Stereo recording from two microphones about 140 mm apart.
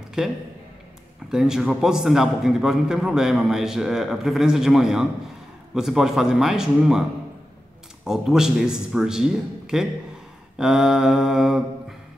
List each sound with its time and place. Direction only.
0.2 s a man's voice: 5° right (ahead or behind)